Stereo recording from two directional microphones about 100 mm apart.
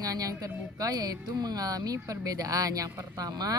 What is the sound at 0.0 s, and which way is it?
A child's voice, 40° right (ahead or behind).